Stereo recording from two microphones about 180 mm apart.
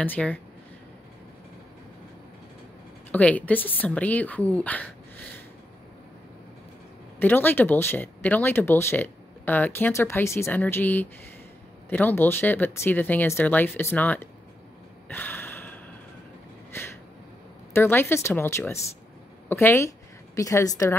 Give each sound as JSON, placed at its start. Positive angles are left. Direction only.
{"t": 0.0, "sound": "speech", "side_deg": 10}
{"t": 3.1, "sound": "speech", "side_deg": 10}
{"t": 7.2, "sound": "speech", "side_deg": 10}
{"t": 15.0, "sound": "a sound", "side_deg": 10}
{"t": 17.7, "sound": "speech", "side_deg": 10}